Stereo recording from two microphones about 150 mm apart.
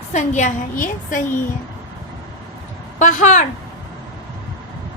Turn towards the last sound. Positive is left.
turn(degrees=55)  # may be behind; listen again after turning